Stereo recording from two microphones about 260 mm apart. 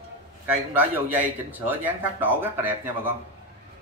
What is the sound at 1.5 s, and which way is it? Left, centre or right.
Speech, centre.